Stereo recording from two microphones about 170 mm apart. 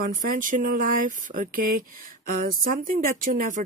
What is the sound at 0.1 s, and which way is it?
Speech, 55° right (ahead or behind).